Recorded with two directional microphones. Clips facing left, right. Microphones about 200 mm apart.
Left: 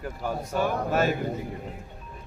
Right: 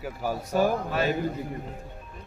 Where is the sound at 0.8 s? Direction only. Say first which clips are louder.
Left 2 dB; 45° left (ahead or behind).